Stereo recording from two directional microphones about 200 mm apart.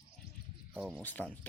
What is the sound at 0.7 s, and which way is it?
Speech, centre (ahead or behind).